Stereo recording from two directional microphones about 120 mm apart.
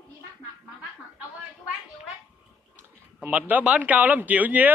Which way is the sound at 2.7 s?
15° right (ahead or behind).